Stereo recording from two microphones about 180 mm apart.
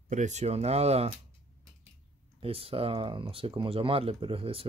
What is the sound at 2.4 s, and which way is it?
Speech, 30° right (ahead or behind).